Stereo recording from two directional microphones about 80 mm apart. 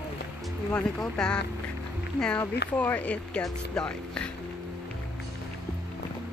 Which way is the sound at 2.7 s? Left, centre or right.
Centre.